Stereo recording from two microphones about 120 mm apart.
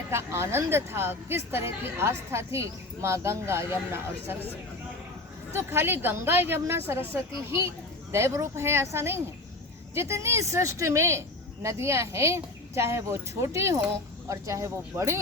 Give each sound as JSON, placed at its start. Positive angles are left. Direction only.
{"t": 0.1, "sound": "a woman's voice", "side_deg": -20}
{"t": 5.5, "sound": "a woman's voice", "side_deg": -20}